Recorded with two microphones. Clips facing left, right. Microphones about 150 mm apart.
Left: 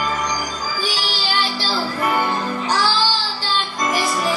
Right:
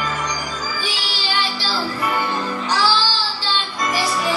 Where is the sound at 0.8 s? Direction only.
40° left (ahead or behind).